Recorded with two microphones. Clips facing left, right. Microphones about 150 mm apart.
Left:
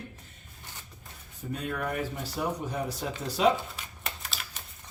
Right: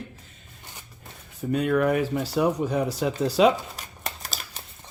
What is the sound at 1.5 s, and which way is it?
Speech, 85° right.